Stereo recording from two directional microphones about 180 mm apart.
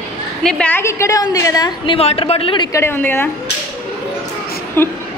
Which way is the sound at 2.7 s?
10° left (ahead or behind).